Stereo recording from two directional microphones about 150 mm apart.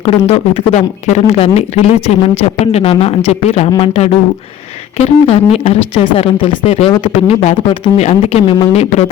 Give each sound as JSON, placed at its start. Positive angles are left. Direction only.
{"t": 0.0, "sound": "speech", "side_deg": 40}